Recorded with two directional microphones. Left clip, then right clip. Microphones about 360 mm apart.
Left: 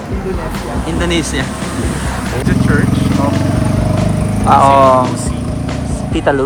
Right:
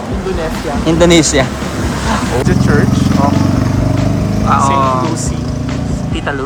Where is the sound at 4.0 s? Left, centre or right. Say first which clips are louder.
Even; centre.